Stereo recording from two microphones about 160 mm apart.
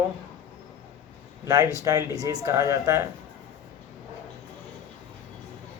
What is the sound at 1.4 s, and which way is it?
Speech, 20° right (ahead or behind).